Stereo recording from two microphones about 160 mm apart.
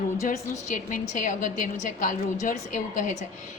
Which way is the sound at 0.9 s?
50° left (ahead or behind).